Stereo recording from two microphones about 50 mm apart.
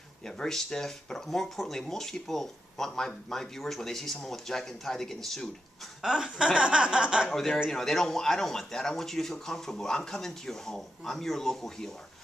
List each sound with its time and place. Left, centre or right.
0.4 s speech: centre
6.0 s speech: centre
7.3 s speech: centre